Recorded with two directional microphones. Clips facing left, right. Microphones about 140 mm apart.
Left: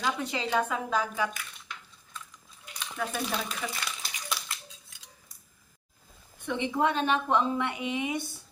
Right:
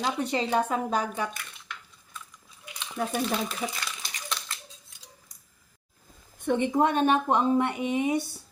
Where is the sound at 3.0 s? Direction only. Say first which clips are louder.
Right 3 dB; 40° right (ahead or behind).